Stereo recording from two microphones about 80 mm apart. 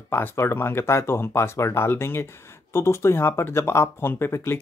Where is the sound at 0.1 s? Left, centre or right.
Left.